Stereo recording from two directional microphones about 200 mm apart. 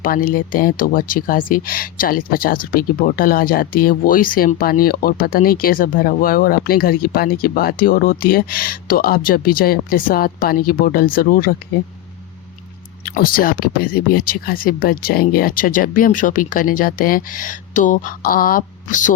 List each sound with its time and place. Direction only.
0.0 s speech: 45° left (ahead or behind)
13.1 s speech: 45° left (ahead or behind)